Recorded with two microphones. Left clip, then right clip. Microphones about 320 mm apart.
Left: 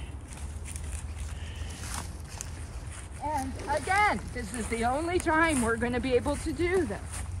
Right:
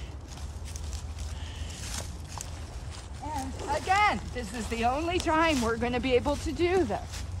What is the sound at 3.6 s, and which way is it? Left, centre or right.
Speech, centre.